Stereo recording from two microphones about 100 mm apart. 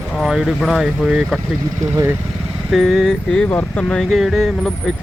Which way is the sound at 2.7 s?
Centre (ahead or behind).